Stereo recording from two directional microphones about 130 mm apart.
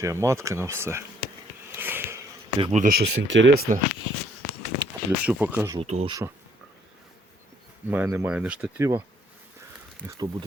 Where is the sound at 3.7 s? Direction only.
85° right.